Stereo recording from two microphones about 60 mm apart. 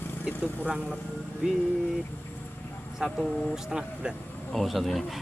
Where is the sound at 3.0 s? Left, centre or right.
Centre.